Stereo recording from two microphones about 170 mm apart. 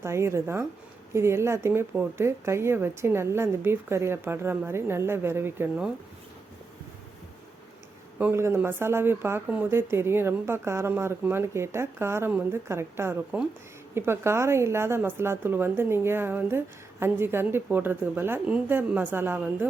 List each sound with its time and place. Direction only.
0.0 s speech: 15° right (ahead or behind)
8.2 s speech: 15° right (ahead or behind)